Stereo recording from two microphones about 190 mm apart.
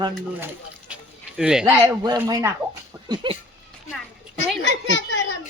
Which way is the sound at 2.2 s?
15° right (ahead or behind).